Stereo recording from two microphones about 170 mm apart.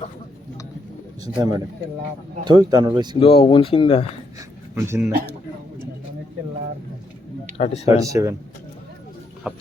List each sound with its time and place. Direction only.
1.2 s speech: 20° right (ahead or behind)
3.2 s speech: 30° left (ahead or behind)
4.7 s speech: 15° right (ahead or behind)
7.6 s speech: 40° left (ahead or behind)
7.9 s speech: 20° right (ahead or behind)
9.5 s a sound: 5° right (ahead or behind)